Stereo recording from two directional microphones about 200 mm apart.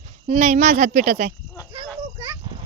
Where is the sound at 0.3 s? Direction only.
35° right (ahead or behind).